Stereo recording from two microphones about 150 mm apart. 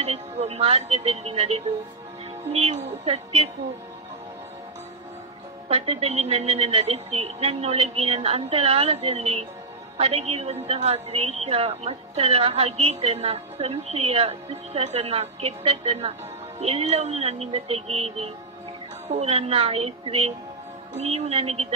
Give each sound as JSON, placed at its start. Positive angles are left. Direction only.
{"t": 0.0, "sound": "a woman's voice", "side_deg": -45}
{"t": 5.7, "sound": "a woman's voice", "side_deg": -40}